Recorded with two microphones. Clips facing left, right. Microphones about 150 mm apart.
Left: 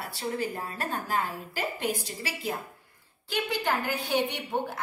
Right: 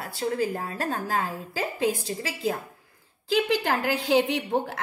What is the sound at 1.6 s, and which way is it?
Speech, 90° right.